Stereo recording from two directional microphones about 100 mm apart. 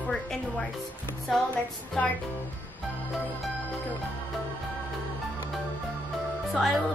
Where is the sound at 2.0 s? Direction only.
15° left (ahead or behind).